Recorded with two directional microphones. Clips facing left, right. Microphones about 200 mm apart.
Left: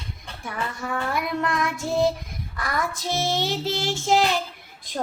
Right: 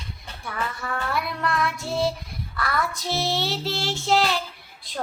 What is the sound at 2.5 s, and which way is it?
Speech, 15° left (ahead or behind).